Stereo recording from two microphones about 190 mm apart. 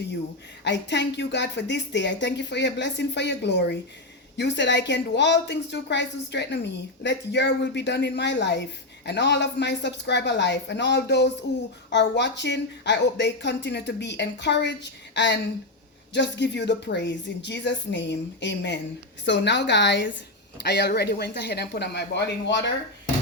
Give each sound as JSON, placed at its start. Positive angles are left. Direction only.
{"t": 0.6, "sound": "a woman's voice", "side_deg": 65}